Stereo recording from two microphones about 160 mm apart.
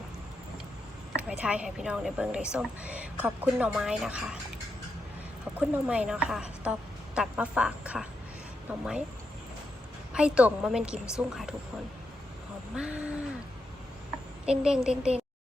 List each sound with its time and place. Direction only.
1.1 s a woman's voice: 10° right (ahead or behind)
5.5 s a woman's voice: 10° right (ahead or behind)
10.1 s a woman's voice: 5° right (ahead or behind)
12.7 s a woman's voice: 5° right (ahead or behind)
14.4 s a woman's voice: 5° right (ahead or behind)